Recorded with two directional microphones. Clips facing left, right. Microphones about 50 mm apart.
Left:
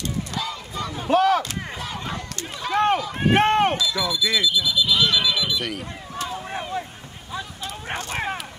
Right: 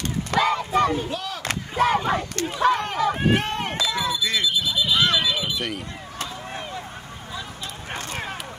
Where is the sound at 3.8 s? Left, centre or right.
Right.